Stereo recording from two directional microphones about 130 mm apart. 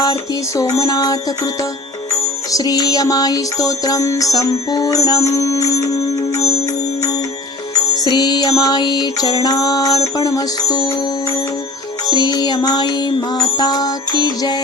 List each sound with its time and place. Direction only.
0.0 s music: 30° left (ahead or behind)
2.5 s music: 30° left (ahead or behind)
8.0 s music: 35° left (ahead or behind)
12.1 s music: 30° left (ahead or behind)